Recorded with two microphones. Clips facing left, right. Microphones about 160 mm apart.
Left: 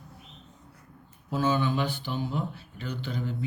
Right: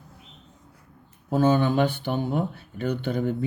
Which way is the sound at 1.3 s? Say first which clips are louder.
Right 6 dB; 50° right (ahead or behind).